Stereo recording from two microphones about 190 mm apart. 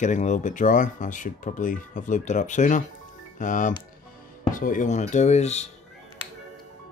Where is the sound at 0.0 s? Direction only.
40° left (ahead or behind).